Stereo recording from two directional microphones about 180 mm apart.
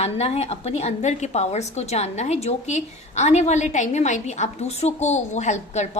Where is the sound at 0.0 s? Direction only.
35° left (ahead or behind).